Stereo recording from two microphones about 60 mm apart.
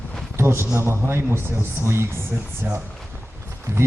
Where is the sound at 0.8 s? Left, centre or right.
Right.